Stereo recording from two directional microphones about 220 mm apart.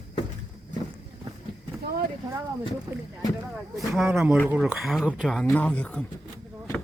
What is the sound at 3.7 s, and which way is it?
Speech, centre (ahead or behind).